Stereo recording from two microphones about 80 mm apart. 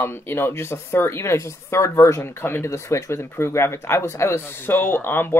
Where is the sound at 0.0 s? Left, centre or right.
Left.